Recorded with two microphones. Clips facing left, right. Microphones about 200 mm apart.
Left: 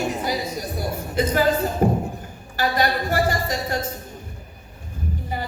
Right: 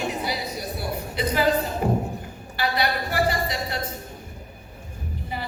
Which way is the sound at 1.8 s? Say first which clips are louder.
Left 6 dB; 45° left (ahead or behind).